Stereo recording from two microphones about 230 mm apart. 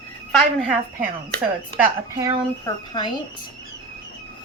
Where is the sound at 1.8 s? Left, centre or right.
Centre.